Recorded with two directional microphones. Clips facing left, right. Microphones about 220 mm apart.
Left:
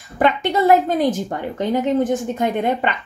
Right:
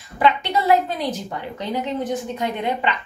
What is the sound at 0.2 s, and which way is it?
A woman's voice, 50° left (ahead or behind).